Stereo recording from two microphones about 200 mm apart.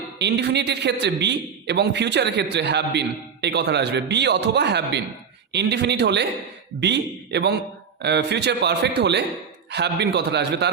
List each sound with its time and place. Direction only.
0.2 s a man's voice: 60° right (ahead or behind)